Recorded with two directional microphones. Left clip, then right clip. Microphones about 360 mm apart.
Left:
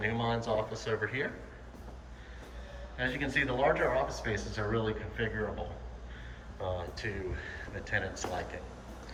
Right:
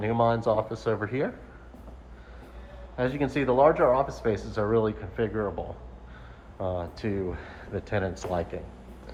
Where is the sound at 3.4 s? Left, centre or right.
Centre.